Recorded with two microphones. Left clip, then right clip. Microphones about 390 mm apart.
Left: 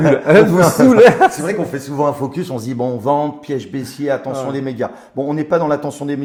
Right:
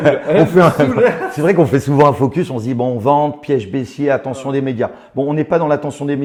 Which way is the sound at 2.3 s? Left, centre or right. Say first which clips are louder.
Right 4 dB; centre.